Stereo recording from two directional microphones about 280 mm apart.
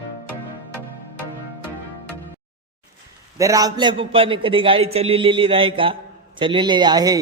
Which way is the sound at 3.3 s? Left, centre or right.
Centre.